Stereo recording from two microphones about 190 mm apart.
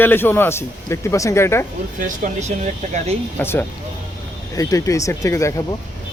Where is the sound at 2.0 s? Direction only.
40° right (ahead or behind).